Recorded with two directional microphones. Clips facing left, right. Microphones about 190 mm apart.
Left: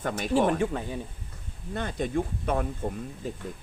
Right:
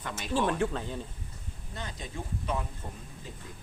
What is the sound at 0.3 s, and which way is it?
Speech, 10° left (ahead or behind).